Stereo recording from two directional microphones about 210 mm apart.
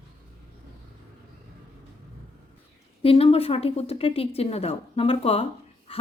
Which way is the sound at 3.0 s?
25° left (ahead or behind).